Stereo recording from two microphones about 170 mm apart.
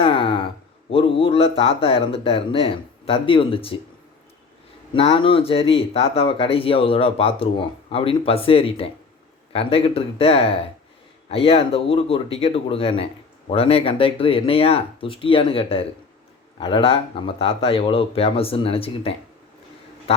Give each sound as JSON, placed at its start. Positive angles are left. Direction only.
{"t": 0.0, "sound": "a man's voice", "side_deg": 30}
{"t": 4.9, "sound": "speech", "side_deg": 35}
{"t": 20.1, "sound": "a sound", "side_deg": 35}